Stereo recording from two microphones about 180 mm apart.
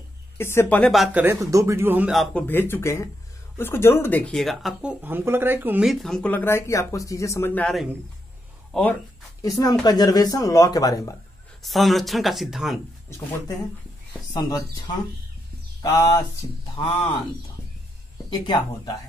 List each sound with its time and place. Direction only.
0.4 s speech: 15° left (ahead or behind)
1.2 s speech: 15° right (ahead or behind)
2.3 s speech: 10° left (ahead or behind)
9.4 s speech: 20° left (ahead or behind)
11.6 s speech: centre (ahead or behind)
14.3 s speech: 20° left (ahead or behind)
18.4 s speech: 25° left (ahead or behind)